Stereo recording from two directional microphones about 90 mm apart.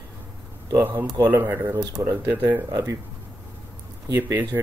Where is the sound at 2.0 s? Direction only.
35° right (ahead or behind).